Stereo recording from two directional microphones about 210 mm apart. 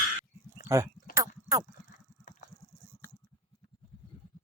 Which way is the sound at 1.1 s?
15° right (ahead or behind).